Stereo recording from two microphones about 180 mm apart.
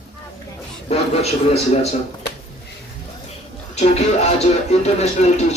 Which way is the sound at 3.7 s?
35° left (ahead or behind).